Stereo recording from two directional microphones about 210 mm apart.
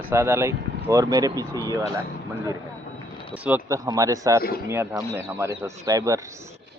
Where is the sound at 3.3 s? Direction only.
5° right (ahead or behind).